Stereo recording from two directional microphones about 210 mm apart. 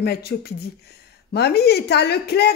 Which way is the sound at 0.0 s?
50° left (ahead or behind).